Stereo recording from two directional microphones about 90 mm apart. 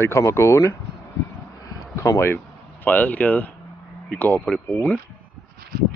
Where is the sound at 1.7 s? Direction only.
35° left (ahead or behind).